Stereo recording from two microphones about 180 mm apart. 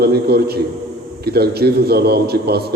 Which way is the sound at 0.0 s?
60° right (ahead or behind).